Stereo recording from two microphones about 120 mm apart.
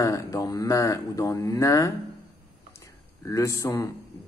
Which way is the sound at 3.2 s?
25° left (ahead or behind).